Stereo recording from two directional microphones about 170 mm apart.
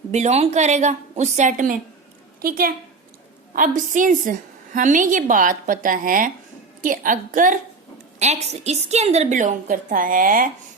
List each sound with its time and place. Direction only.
0.1 s a woman's voice: 40° right (ahead or behind)
8.2 s a woman's voice: 40° right (ahead or behind)